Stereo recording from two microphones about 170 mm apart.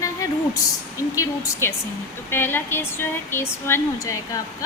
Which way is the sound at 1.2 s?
15° left (ahead or behind).